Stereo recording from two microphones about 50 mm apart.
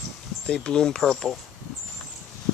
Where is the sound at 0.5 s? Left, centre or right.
Centre.